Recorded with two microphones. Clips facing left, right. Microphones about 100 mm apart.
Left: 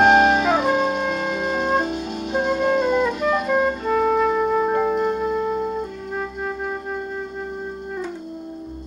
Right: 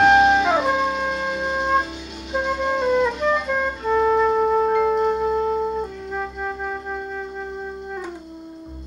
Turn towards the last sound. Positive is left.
turn(degrees=0)  # may be behind; listen again after turning